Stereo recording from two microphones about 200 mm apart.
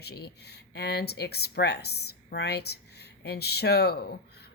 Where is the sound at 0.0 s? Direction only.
55° left (ahead or behind).